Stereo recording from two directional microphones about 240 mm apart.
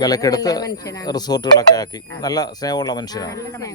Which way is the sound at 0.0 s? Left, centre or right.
Centre.